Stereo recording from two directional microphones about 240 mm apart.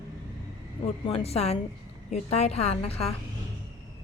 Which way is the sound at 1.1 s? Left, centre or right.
Left.